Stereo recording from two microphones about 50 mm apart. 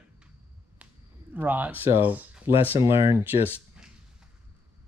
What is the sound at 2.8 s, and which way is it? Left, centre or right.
Speech, right.